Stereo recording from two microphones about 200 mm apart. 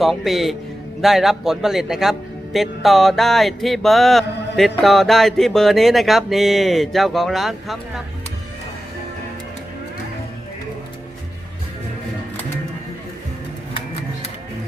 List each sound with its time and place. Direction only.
0.0 s a man's voice: centre (ahead or behind)